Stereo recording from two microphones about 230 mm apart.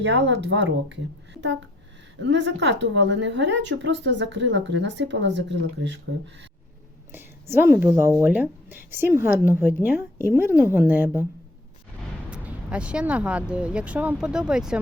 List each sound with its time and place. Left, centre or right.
0.0 s a woman's voice: right
7.1 s a woman's voice: centre
12.3 s speech: centre